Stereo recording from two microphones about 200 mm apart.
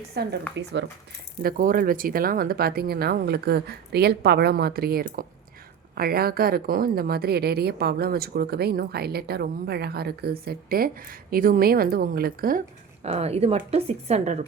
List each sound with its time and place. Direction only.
0.1 s a woman's voice: 55° right (ahead or behind)
1.4 s a woman's voice: 45° right (ahead or behind)